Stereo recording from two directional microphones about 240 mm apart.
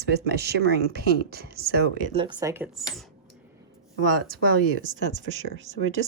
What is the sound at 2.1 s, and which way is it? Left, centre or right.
Speech, right.